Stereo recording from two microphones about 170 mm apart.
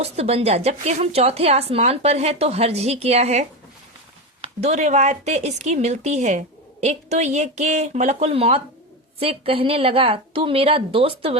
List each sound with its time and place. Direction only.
0.0 s a woman's voice: 35° right (ahead or behind)